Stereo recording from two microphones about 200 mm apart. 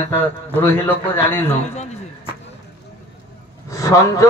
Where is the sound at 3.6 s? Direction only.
15° left (ahead or behind).